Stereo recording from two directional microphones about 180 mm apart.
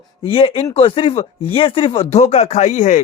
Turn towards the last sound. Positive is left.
turn(degrees=40)  # may be behind; listen again after turning